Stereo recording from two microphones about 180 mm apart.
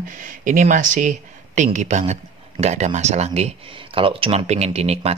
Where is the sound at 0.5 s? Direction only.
45° right (ahead or behind).